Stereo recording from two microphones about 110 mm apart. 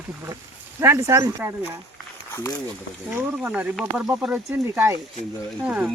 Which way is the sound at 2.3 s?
30° left (ahead or behind).